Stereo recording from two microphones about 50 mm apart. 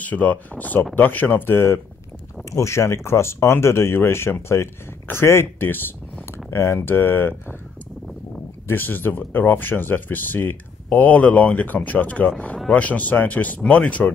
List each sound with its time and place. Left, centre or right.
0.0 s speech: left
2.5 s speech: left
8.6 s speech: left